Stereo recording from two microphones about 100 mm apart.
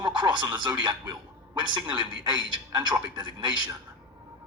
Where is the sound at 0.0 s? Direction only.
50° right (ahead or behind).